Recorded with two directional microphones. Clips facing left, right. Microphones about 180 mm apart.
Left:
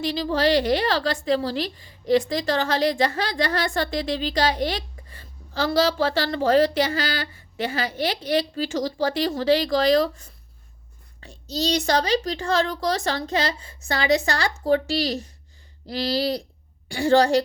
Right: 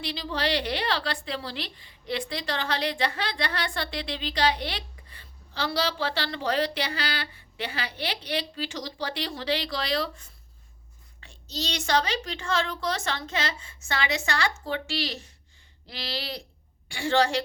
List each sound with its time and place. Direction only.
0.0 s a woman's voice: 45° left (ahead or behind)